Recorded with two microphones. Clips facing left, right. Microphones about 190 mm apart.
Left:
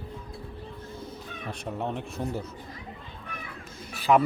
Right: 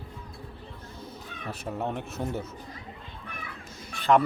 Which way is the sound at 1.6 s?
5° right (ahead or behind).